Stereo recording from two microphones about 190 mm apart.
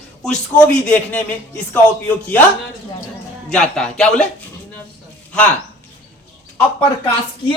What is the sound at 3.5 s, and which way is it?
Speech, 5° left (ahead or behind).